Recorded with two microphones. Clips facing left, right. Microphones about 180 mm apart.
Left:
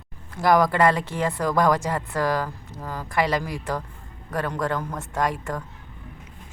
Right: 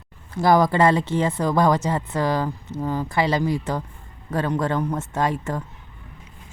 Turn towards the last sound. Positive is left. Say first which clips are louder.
# right 2 dB
turn(degrees=-25)  # may be behind; listen again after turning